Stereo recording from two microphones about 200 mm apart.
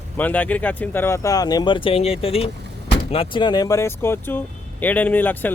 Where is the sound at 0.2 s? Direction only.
10° left (ahead or behind).